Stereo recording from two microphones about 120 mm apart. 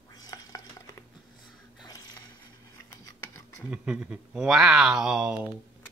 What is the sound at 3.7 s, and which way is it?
Speech, 10° right (ahead or behind).